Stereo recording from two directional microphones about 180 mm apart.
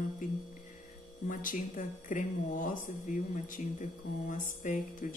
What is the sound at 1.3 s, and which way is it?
Speech, 50° left (ahead or behind).